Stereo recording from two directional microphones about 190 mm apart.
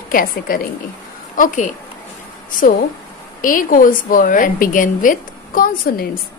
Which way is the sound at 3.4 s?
45° left (ahead or behind).